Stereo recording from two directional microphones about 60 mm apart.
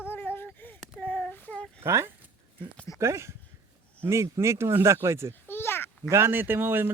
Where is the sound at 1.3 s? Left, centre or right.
Left.